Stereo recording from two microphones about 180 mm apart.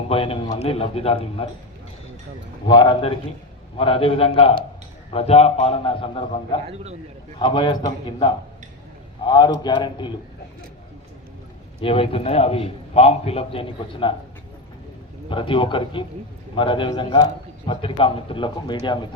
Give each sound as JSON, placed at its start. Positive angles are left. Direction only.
{"t": 0.1, "sound": "a man's voice", "side_deg": 30}
{"t": 2.6, "sound": "a man's voice", "side_deg": 25}
{"t": 11.8, "sound": "a man's voice", "side_deg": 30}
{"t": 15.3, "sound": "a man's voice", "side_deg": 30}